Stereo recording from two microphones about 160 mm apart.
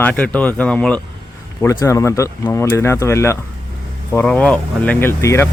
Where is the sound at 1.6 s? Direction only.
20° left (ahead or behind).